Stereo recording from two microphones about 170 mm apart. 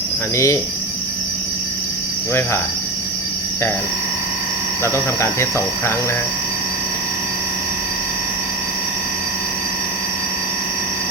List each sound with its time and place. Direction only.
0.3 s speech: 20° left (ahead or behind)
4.8 s speech: 15° left (ahead or behind)